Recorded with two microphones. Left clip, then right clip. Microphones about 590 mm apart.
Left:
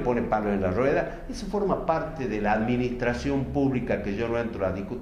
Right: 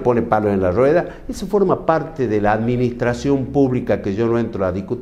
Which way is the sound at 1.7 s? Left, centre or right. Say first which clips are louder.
Right 8 dB; right.